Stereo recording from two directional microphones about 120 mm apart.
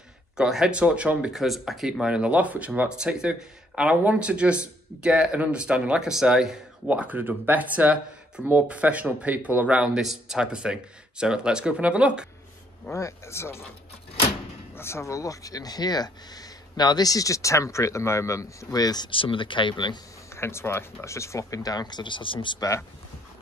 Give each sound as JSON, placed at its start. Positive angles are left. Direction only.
{"t": 0.4, "sound": "speech", "side_deg": -5}
{"t": 12.9, "sound": "speech", "side_deg": 25}
{"t": 14.8, "sound": "speech", "side_deg": 20}
{"t": 20.3, "sound": "speech", "side_deg": 20}